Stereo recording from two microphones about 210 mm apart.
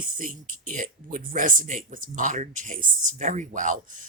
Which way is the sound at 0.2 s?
40° right (ahead or behind).